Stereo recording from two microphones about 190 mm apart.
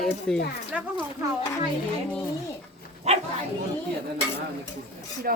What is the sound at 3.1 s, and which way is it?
Speech, 35° right (ahead or behind).